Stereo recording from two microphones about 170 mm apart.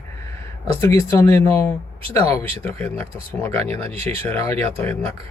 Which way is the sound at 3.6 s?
35° right (ahead or behind).